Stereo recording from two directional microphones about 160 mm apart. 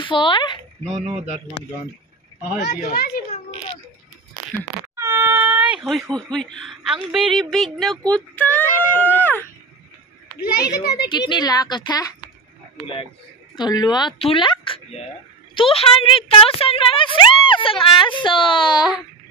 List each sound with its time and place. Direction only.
0.0 s speech: 30° left (ahead or behind)
2.7 s speech: 55° left (ahead or behind)
4.9 s speech: 15° right (ahead or behind); by 8.0 s centre (ahead or behind)
8.1 s a sound: 10° left (ahead or behind)
10.4 s a child's voice: 75° left (ahead or behind)
11.1 s a woman's voice: 30° left (ahead or behind)
13.6 s speech: 25° left (ahead or behind)